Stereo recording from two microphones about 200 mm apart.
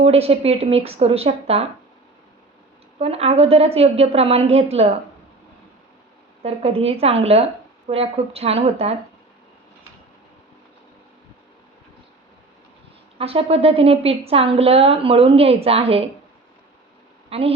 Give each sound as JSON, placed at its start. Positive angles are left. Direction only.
{"t": 0.0, "sound": "a woman's voice", "side_deg": -30}
{"t": 3.0, "sound": "a woman's voice", "side_deg": -30}
{"t": 6.4, "sound": "a woman's voice", "side_deg": -30}
{"t": 13.1, "sound": "a woman's voice", "side_deg": -30}
{"t": 17.2, "sound": "a sound", "side_deg": -30}